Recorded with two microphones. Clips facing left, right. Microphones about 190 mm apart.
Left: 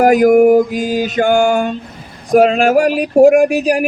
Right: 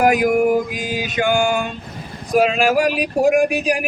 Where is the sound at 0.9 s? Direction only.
40° left (ahead or behind).